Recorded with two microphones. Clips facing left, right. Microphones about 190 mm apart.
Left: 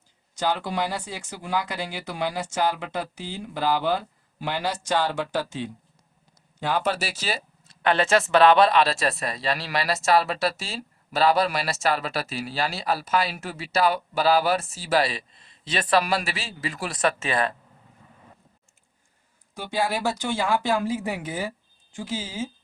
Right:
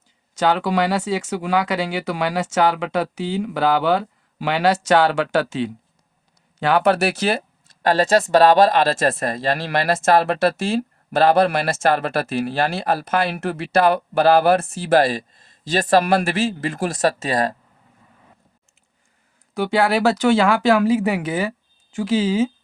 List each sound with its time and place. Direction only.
0.3 s speech: 90° right; by 7.8 s 60° right (ahead or behind)
7.8 s speech: 40° right (ahead or behind)
19.5 s speech: 75° right (ahead or behind)